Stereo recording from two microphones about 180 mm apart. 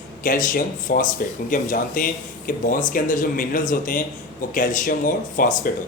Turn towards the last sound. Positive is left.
turn(degrees=50)  # may be behind; listen again after turning